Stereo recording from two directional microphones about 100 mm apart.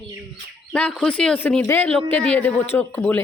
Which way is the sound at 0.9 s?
10° left (ahead or behind).